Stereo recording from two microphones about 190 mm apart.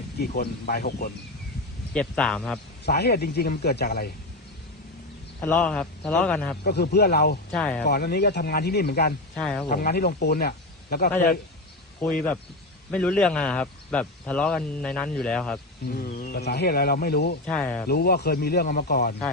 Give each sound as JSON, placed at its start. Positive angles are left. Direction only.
{"t": 0.2, "sound": "speech", "side_deg": 55}
{"t": 1.9, "sound": "a man's voice", "side_deg": 5}
{"t": 2.8, "sound": "a man's voice", "side_deg": 55}
{"t": 5.4, "sound": "speech", "side_deg": 10}
{"t": 6.7, "sound": "a man's voice", "side_deg": 55}
{"t": 7.5, "sound": "a man's voice", "side_deg": 5}
{"t": 7.9, "sound": "a man's voice", "side_deg": 55}
{"t": 9.3, "sound": "a man's voice", "side_deg": 5}
{"t": 9.6, "sound": "speech", "side_deg": 50}
{"t": 12.9, "sound": "a man's voice", "side_deg": 5}
{"t": 15.9, "sound": "speech", "side_deg": 50}
{"t": 17.4, "sound": "a man's voice", "side_deg": 5}
{"t": 17.8, "sound": "a man's voice", "side_deg": 55}